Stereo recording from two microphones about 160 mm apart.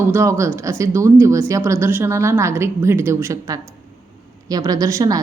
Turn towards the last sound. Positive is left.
turn(degrees=-20)  # may be behind; listen again after turning